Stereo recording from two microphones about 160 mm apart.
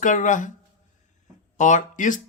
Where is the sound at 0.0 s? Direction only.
55° left (ahead or behind).